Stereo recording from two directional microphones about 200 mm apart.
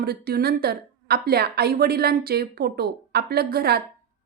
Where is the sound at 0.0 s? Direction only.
50° right (ahead or behind).